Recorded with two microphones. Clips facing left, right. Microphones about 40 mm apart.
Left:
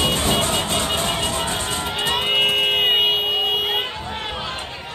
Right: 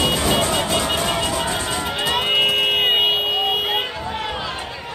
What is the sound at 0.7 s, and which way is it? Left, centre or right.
Music, right.